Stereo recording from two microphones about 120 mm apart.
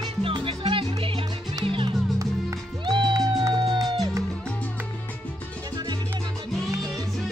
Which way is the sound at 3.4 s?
35° right (ahead or behind).